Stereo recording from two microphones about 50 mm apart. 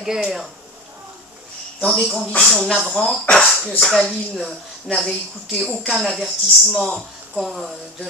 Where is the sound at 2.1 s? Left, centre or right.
Left.